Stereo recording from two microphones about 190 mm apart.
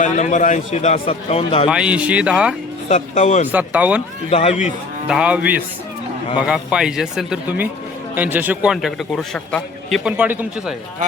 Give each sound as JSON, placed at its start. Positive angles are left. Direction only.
{"t": 0.0, "sound": "a man's voice", "side_deg": 40}
{"t": 1.7, "sound": "a man's voice", "side_deg": -5}
{"t": 2.9, "sound": "a man's voice", "side_deg": 35}
{"t": 3.5, "sound": "moo", "side_deg": -5}
{"t": 4.3, "sound": "a man's voice", "side_deg": 30}
{"t": 5.0, "sound": "moo", "side_deg": -5}
{"t": 6.4, "sound": "a man's voice", "side_deg": -5}